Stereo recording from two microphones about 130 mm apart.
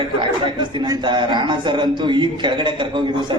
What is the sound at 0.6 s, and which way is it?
A man's voice, 35° right (ahead or behind).